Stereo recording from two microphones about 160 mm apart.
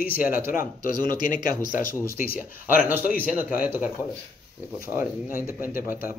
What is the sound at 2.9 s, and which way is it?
Speech, 10° right (ahead or behind).